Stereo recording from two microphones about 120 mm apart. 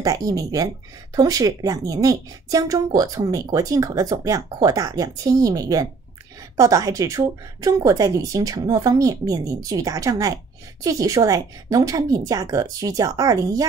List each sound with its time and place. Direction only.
0.0 s speech: 30° right (ahead or behind)